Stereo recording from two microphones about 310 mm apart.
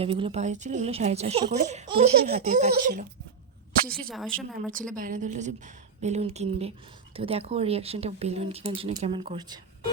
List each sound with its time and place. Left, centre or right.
0.0 s speech: centre
4.1 s speech: centre
4.9 s speech: right